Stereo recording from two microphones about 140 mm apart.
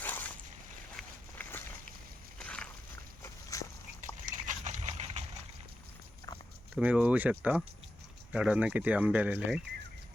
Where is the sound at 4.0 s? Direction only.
65° right (ahead or behind).